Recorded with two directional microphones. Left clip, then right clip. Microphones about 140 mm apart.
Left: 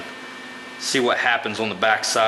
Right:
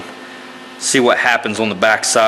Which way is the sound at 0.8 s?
25° right (ahead or behind).